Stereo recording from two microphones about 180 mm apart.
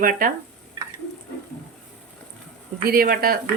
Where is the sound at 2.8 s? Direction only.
55° right (ahead or behind).